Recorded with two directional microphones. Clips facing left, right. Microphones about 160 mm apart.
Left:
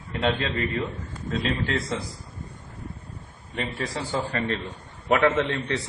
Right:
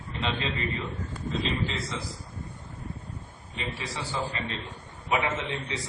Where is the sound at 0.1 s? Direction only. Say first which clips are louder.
Left 7 dB; 55° left (ahead or behind).